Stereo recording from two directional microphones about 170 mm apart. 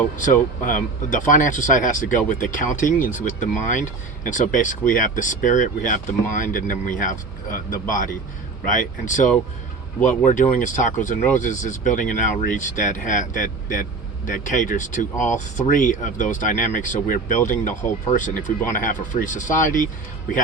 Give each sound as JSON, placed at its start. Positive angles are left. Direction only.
{"t": 0.2, "sound": "speech", "side_deg": 50}